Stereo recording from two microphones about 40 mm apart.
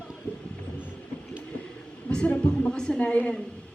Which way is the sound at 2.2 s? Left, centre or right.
Left.